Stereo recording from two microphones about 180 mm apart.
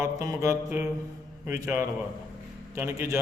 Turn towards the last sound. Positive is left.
turn(degrees=-15)  # may be behind; listen again after turning